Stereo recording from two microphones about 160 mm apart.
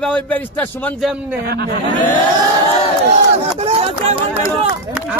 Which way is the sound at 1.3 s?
85° right.